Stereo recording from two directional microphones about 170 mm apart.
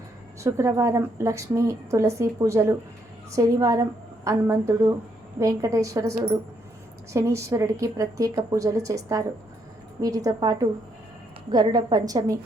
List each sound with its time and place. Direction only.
0.4 s a woman's voice: 15° right (ahead or behind)